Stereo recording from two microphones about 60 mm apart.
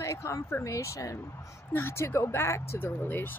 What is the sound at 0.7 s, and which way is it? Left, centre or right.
Speech, left.